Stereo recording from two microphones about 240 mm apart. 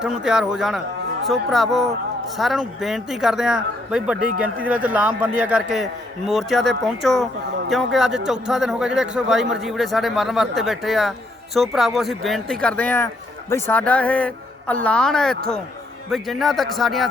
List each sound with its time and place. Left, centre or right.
0.0 s a man's voice: centre